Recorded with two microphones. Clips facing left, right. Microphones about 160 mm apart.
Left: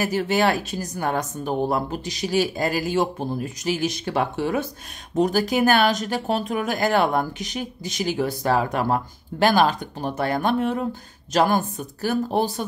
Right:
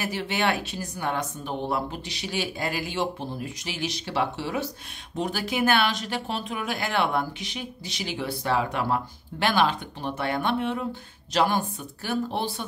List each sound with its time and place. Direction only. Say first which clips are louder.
0.0 s speech: left 6 dB; 40° left (ahead or behind)